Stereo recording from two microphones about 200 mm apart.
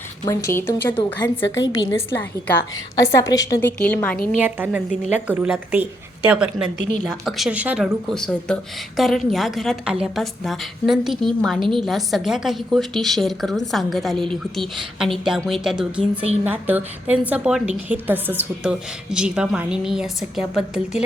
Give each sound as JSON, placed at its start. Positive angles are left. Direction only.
{"t": 0.3, "sound": "a woman's voice", "side_deg": 15}
{"t": 1.5, "sound": "a woman's voice", "side_deg": 65}
{"t": 1.7, "sound": "a woman's voice", "side_deg": 15}
{"t": 4.4, "sound": "speech", "side_deg": -10}
{"t": 4.9, "sound": "a woman's voice", "side_deg": 35}
{"t": 5.3, "sound": "a woman's voice", "side_deg": -10}
{"t": 16.0, "sound": "a woman's voice", "side_deg": -30}
{"t": 16.4, "sound": "a woman's voice", "side_deg": -10}